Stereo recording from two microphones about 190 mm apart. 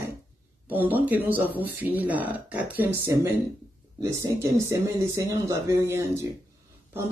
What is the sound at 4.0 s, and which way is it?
Speech, 15° right (ahead or behind).